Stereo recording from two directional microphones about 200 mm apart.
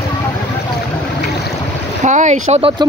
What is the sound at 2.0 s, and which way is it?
Speech, 35° right (ahead or behind).